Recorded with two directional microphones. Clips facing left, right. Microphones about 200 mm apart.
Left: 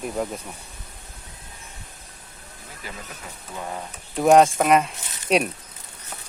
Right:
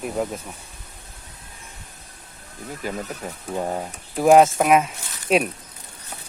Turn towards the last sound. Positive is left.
turn(degrees=0)  # may be behind; listen again after turning